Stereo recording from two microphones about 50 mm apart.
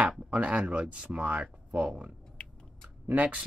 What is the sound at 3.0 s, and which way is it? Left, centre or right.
Speech, right.